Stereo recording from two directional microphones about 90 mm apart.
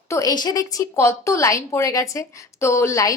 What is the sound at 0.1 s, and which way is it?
A woman's voice, 40° left (ahead or behind).